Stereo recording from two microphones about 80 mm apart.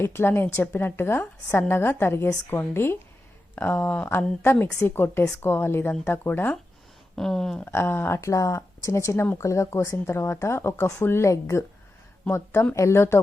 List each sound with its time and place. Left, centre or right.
0.0 s a woman's voice: left
7.2 s speech: centre
7.6 s speech: left
12.7 s speech: left